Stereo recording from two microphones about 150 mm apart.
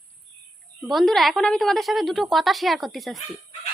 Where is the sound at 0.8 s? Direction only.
Centre (ahead or behind).